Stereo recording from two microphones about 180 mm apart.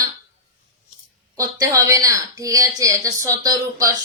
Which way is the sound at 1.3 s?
20° right (ahead or behind).